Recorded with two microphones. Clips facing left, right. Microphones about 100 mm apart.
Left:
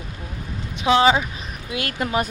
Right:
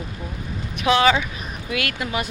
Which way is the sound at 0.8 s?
25° left (ahead or behind).